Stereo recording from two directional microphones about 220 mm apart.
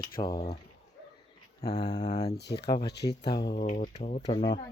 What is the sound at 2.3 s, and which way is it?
Speech, 50° left (ahead or behind).